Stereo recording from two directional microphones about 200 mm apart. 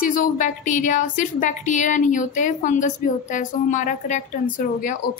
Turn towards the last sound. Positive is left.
turn(degrees=40)  # may be behind; listen again after turning